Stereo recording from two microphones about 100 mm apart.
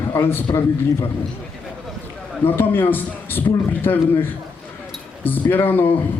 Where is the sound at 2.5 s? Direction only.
20° left (ahead or behind).